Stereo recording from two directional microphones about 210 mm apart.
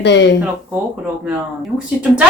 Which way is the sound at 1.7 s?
5° right (ahead or behind).